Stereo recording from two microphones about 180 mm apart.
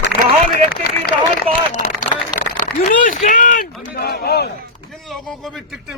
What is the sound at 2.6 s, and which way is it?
Speech, 50° left (ahead or behind).